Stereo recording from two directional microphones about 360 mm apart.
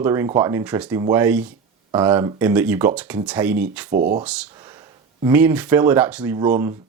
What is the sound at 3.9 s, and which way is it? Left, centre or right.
Speech, right.